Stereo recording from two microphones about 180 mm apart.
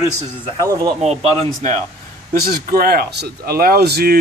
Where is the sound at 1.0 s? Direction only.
35° right (ahead or behind).